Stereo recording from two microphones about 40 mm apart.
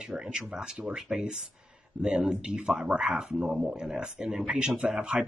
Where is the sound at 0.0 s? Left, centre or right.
Right.